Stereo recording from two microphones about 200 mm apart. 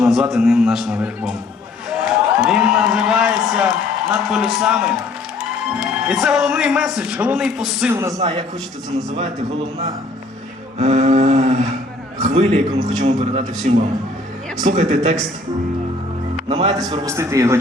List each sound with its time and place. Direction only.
0.0 s a man's voice: centre (ahead or behind)
1.9 s a sound: centre (ahead or behind)
4.1 s a man's voice: centre (ahead or behind)
8.2 s a man's voice: 30° right (ahead or behind)
10.8 s a sound: 35° right (ahead or behind)
12.2 s a man's voice: 35° right (ahead or behind)
16.5 s a man's voice: 25° right (ahead or behind)
17.1 s a man's voice: 15° right (ahead or behind)